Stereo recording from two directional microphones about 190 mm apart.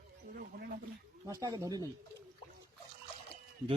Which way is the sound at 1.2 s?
20° right (ahead or behind).